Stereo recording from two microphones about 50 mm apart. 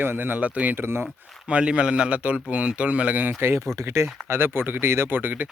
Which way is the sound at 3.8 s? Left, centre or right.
Right.